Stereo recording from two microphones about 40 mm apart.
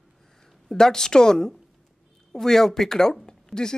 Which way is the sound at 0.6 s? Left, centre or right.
Centre.